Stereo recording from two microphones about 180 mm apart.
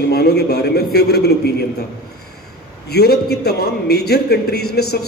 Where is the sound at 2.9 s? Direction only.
60° left (ahead or behind).